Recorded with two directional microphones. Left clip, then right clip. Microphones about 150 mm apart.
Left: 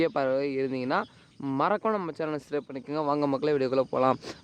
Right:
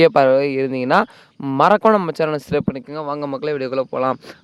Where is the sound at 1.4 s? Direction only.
45° right (ahead or behind).